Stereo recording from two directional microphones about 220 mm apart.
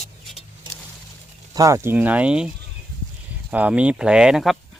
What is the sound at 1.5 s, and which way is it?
Speech, 15° right (ahead or behind).